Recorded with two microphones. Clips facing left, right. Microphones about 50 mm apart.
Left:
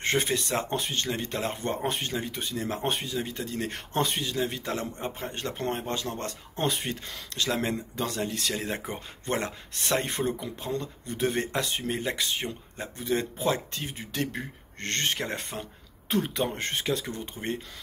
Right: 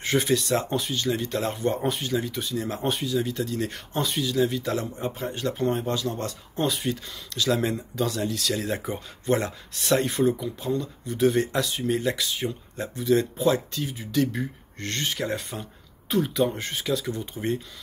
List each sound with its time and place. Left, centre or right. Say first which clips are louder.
0.0 s speech: right 3 dB; left
10.0 s speech: right 6 dB; left
11.9 s speech: right 6 dB; left